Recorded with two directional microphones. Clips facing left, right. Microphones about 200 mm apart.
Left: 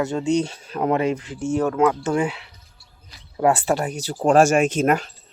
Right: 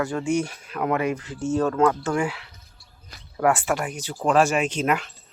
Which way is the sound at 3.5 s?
35° left (ahead or behind).